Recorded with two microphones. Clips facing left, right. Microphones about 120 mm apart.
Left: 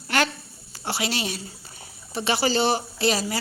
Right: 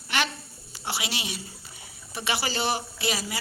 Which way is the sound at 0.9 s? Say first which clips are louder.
Left 5 dB; 35° left (ahead or behind).